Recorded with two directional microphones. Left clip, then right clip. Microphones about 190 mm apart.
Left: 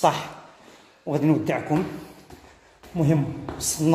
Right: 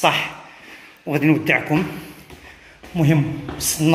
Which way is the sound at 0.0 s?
25° left (ahead or behind).